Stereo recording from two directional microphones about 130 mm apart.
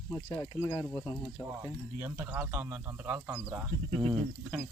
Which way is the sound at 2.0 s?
25° right (ahead or behind).